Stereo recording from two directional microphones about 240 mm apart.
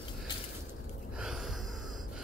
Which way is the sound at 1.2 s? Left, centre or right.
Centre.